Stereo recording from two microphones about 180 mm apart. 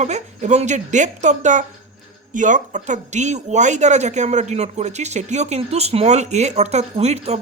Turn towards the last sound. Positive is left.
turn(degrees=-35)  # may be behind; listen again after turning